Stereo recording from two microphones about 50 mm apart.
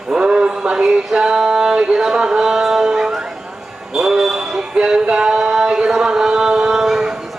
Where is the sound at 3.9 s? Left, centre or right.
Centre.